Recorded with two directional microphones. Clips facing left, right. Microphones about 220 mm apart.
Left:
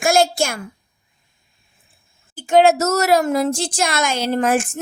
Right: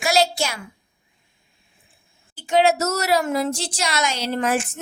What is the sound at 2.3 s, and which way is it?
Speech, 50° left (ahead or behind).